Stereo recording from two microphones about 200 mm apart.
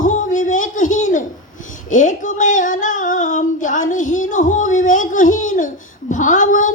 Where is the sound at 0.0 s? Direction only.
40° left (ahead or behind).